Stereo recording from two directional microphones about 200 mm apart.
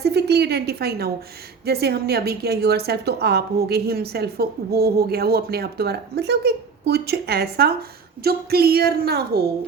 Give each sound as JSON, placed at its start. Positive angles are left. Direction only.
{"t": 0.0, "sound": "a woman's voice", "side_deg": -55}